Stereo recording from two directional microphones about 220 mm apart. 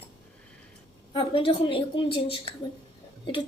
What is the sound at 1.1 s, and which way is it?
A woman's voice, 25° left (ahead or behind).